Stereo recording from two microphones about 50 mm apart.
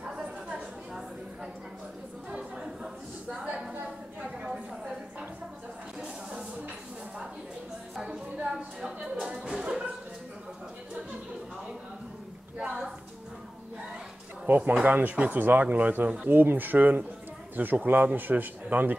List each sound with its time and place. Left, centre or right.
0.0 s chatter: centre
2.3 s chatter: centre
4.2 s a sound: centre
7.9 s music: centre
8.5 s a sound: centre
12.5 s a woman's voice: centre
14.4 s speech: right